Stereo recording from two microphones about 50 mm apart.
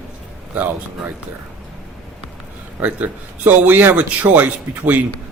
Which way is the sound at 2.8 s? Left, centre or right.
Right.